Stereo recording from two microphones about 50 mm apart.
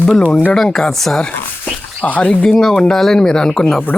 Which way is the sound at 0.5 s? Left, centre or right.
Centre.